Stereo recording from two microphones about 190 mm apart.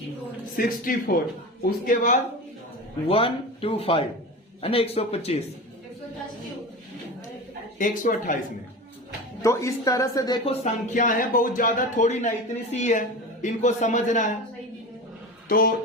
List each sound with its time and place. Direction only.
0.5 s speech: 50° left (ahead or behind)
3.1 s speech: 30° left (ahead or behind)
7.8 s speech: 45° left (ahead or behind)
9.4 s speech: 15° left (ahead or behind); by 14.3 s 40° left (ahead or behind)
15.4 s a man's voice: 50° left (ahead or behind)